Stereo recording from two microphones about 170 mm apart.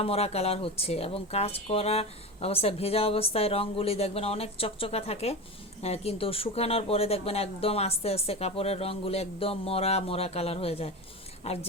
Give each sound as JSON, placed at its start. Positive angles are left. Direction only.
{"t": 0.0, "sound": "speech", "side_deg": 35}